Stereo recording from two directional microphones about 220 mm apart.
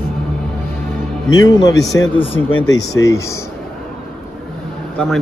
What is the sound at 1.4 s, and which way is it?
Speech, 15° left (ahead or behind).